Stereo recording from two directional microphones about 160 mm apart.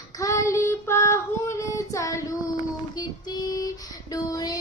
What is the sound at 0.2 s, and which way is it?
Child singing, 20° left (ahead or behind).